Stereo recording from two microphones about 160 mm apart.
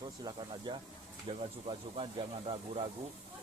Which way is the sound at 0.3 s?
30° right (ahead or behind).